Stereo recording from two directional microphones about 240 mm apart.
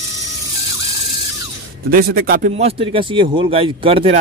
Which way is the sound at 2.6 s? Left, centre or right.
Right.